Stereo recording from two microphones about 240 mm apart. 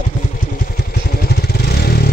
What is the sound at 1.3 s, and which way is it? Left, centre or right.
Vehicle, left.